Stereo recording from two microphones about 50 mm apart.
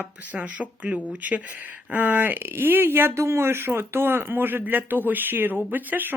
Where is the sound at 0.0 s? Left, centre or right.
Right.